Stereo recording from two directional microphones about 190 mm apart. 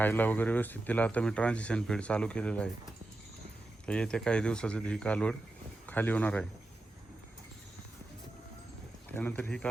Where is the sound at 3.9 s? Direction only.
5° left (ahead or behind).